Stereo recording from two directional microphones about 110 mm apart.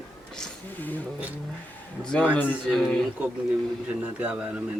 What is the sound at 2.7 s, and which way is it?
Speech, 5° left (ahead or behind).